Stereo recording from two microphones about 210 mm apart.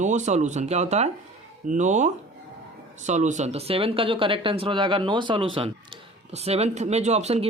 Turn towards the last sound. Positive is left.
turn(degrees=-30)  # may be behind; listen again after turning